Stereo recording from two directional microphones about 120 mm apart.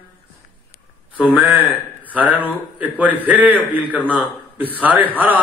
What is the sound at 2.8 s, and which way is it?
A man's voice, 15° right (ahead or behind).